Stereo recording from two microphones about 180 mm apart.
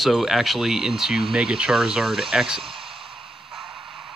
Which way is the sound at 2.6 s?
30° right (ahead or behind).